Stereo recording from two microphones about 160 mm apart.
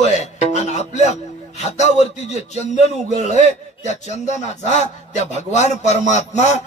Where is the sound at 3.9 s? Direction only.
45° left (ahead or behind).